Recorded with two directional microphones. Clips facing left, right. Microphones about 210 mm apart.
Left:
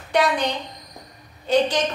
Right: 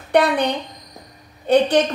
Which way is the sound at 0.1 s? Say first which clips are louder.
Right 4 dB; 60° right (ahead or behind).